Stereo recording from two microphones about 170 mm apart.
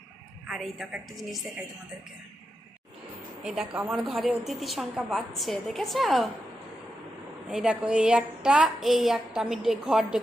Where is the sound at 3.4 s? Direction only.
5° right (ahead or behind).